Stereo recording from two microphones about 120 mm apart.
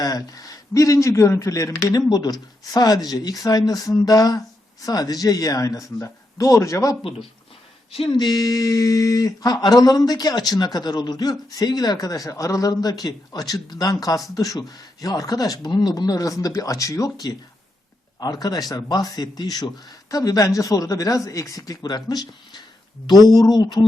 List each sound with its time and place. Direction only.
0.0 s speech: 30° left (ahead or behind)
8.1 s speech: 35° left (ahead or behind)